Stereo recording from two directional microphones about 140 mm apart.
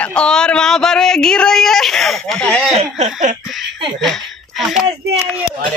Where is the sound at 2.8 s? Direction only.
55° right (ahead or behind).